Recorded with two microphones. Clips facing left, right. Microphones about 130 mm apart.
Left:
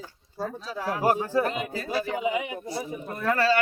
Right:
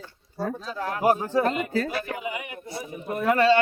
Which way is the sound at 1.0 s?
20° right (ahead or behind).